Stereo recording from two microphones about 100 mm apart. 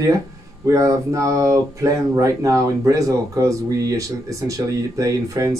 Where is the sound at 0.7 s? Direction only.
30° right (ahead or behind).